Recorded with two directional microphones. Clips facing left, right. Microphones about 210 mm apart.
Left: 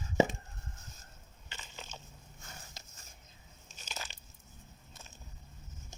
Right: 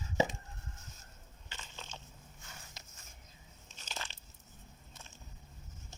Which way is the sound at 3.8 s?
10° left (ahead or behind).